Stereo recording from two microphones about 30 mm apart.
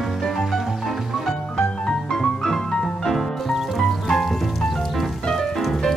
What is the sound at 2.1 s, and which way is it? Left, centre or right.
Music, centre.